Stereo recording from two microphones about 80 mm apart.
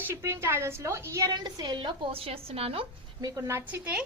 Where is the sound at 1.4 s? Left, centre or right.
Right.